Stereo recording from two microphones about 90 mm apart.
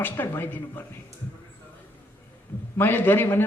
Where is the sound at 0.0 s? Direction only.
25° left (ahead or behind).